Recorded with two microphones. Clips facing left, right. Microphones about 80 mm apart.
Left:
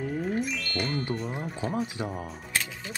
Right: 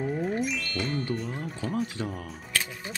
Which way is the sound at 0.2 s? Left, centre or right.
Centre.